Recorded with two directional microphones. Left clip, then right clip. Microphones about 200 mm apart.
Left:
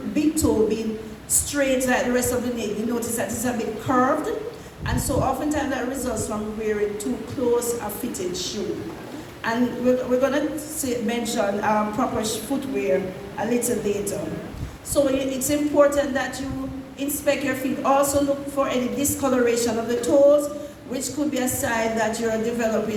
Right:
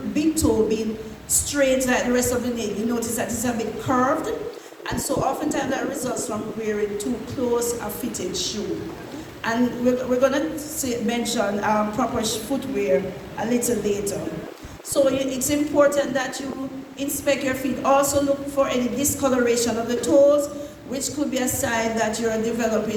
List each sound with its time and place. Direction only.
0.1 s a woman's voice: 40° right (ahead or behind)
8.3 s a woman's voice: 40° right (ahead or behind)